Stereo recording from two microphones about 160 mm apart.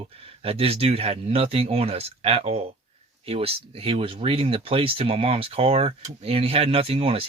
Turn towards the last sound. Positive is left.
turn(degrees=-35)  # may be behind; listen again after turning